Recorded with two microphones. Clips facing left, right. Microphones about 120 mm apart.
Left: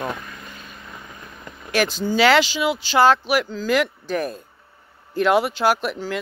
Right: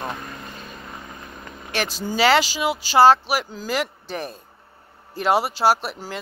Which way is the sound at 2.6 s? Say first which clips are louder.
Right 1 dB; 40° right (ahead or behind).